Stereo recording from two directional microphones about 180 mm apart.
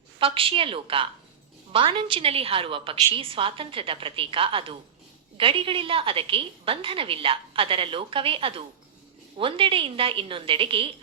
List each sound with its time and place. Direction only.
0.2 s a woman's voice: 30° right (ahead or behind)